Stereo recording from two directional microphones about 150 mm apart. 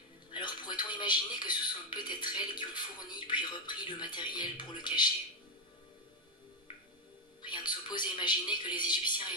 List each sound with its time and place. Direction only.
0.3 s a man's voice: 30° left (ahead or behind)
7.4 s speech: 30° left (ahead or behind)